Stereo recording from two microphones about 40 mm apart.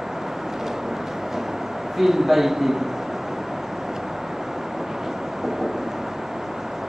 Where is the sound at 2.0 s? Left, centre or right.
Centre.